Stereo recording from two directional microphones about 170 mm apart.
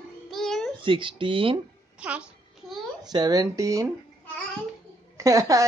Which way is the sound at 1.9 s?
5° right (ahead or behind).